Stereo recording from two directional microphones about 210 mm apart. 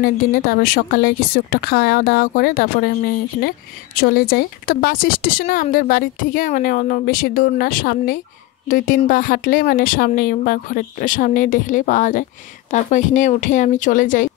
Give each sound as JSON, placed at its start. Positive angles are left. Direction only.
{"t": 0.0, "sound": "speech", "side_deg": 45}
{"t": 4.0, "sound": "speech", "side_deg": 45}